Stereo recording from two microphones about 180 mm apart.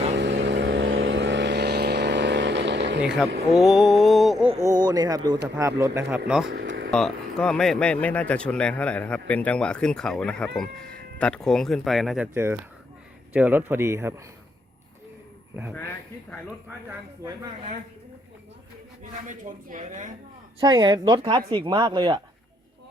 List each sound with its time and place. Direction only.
0.2 s vehicle: 70° right (ahead or behind)
3.5 s speech: centre (ahead or behind)
4.5 s speech: 20° right (ahead or behind)
6.1 s speech: 5° right (ahead or behind)
6.5 s vehicle: 75° right (ahead or behind)
6.9 s speech: 5° left (ahead or behind); by 14.2 s 15° right (ahead or behind)
15.7 s speech: 10° left (ahead or behind)
19.3 s speech: 45° right (ahead or behind)
20.6 s speech: 20° right (ahead or behind)